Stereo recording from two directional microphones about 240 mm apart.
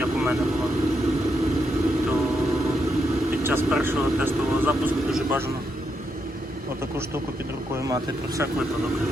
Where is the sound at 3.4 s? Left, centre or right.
Centre.